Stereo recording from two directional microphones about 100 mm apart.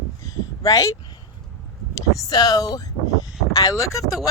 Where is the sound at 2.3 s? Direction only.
40° left (ahead or behind).